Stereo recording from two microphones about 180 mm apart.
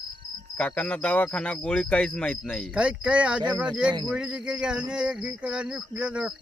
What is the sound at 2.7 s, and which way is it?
Speech, 5° right (ahead or behind).